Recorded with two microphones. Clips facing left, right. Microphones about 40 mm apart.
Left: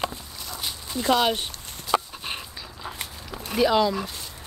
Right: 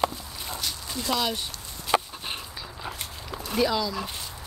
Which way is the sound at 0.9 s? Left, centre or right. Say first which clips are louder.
Left 6 dB; left.